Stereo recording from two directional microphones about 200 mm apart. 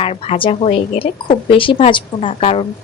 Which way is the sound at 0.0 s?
30° left (ahead or behind).